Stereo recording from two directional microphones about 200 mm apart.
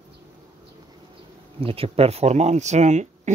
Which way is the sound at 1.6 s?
30° right (ahead or behind).